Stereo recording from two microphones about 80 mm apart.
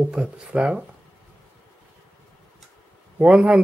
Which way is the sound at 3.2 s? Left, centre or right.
Centre.